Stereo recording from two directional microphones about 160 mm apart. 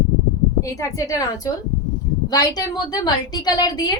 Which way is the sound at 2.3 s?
25° left (ahead or behind).